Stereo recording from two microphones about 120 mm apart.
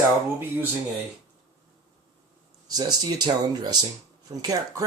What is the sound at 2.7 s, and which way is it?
Speech, 30° right (ahead or behind).